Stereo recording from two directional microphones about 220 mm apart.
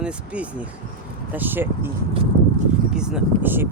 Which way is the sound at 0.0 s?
5° right (ahead or behind).